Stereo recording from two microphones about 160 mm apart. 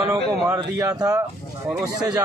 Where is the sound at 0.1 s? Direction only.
20° right (ahead or behind).